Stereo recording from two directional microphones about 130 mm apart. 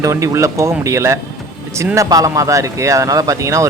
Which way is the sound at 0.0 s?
25° right (ahead or behind).